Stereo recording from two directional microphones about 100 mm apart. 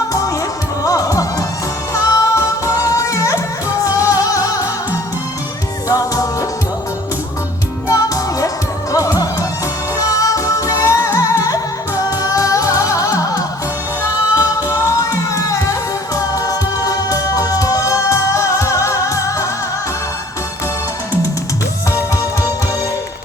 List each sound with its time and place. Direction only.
0.9 s music: 35° left (ahead or behind)
5.9 s music: 40° left (ahead or behind)
7.9 s music: 35° left (ahead or behind)